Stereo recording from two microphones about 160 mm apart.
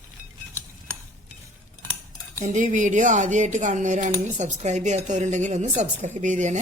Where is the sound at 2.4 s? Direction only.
50° right (ahead or behind).